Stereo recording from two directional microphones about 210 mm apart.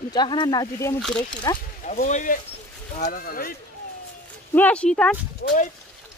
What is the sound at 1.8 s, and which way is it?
Speech, 35° left (ahead or behind).